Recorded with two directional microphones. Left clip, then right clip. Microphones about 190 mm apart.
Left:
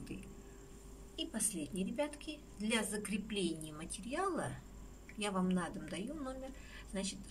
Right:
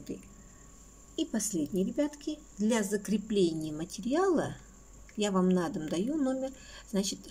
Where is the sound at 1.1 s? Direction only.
35° right (ahead or behind).